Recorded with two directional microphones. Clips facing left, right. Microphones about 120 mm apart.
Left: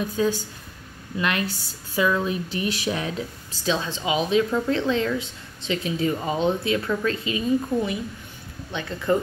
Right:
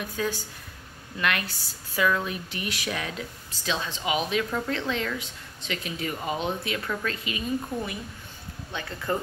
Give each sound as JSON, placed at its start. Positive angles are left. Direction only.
{"t": 0.2, "sound": "speech", "side_deg": 25}